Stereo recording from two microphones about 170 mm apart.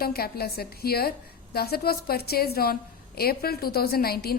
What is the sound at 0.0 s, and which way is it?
Speech, 65° left (ahead or behind).